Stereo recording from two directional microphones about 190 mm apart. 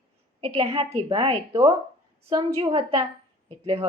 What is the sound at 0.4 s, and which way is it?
A woman's voice, 25° right (ahead or behind).